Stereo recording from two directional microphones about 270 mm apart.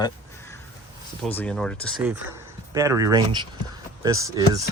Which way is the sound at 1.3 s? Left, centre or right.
Centre.